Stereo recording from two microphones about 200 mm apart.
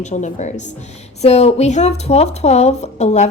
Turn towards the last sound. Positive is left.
turn(degrees=35)  # may be behind; listen again after turning